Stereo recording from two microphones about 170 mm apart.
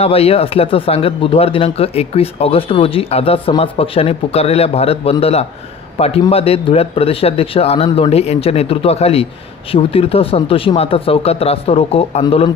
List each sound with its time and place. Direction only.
0.0 s speech: 35° left (ahead or behind)